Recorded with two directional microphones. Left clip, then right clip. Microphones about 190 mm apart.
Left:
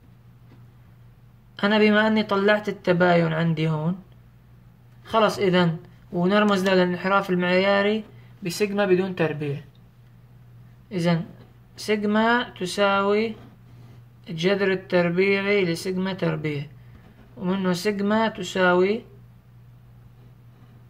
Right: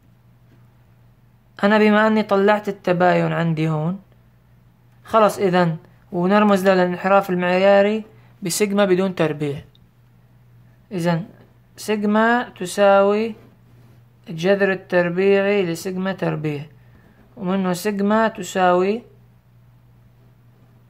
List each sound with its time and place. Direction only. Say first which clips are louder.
1.6 s speech: right 4 dB; 35° right (ahead or behind)
5.0 s speech: right 5 dB; 35° right (ahead or behind)
10.9 s speech: right 3 dB; 35° right (ahead or behind)